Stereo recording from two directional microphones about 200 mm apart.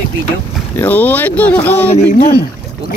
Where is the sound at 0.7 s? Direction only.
10° left (ahead or behind).